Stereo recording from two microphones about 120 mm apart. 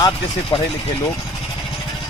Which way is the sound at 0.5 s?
40° left (ahead or behind).